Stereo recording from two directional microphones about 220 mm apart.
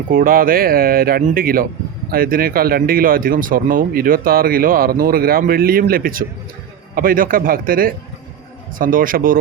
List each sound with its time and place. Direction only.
0.1 s speech: 40° right (ahead or behind)